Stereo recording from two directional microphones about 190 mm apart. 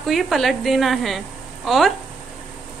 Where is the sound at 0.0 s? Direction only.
Centre (ahead or behind).